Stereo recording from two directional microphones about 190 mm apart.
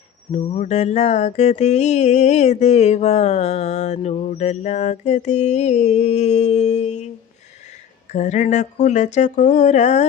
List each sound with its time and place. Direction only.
0.3 s mantra: 35° left (ahead or behind)
8.1 s mantra: 40° left (ahead or behind)